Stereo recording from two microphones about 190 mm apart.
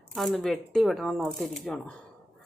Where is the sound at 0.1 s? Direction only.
Centre (ahead or behind).